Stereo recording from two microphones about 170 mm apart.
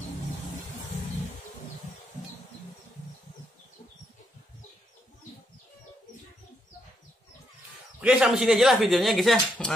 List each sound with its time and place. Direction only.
8.0 s speech: 5° right (ahead or behind)